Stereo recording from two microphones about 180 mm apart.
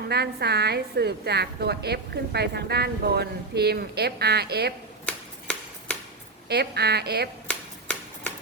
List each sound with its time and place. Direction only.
0.1 s a woman's voice: 65° right (ahead or behind)
5.0 s a sound: 5° left (ahead or behind)
6.5 s a woman's voice: 65° right (ahead or behind)